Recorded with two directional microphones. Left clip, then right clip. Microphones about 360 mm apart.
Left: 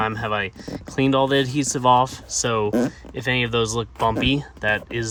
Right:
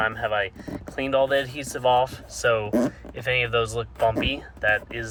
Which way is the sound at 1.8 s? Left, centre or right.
Left.